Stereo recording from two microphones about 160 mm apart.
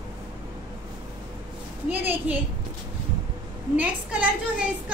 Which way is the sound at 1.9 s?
10° right (ahead or behind).